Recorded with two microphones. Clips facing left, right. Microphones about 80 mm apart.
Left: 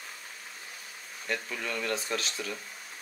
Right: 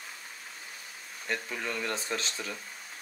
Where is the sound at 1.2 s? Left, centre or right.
Right.